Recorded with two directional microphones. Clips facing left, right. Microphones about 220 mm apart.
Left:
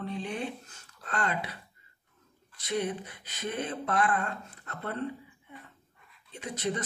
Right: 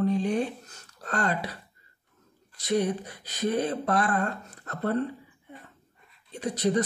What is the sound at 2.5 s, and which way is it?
Speech, 40° right (ahead or behind).